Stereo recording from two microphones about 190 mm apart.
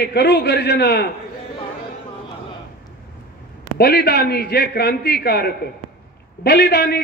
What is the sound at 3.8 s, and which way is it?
A man's voice, 55° left (ahead or behind).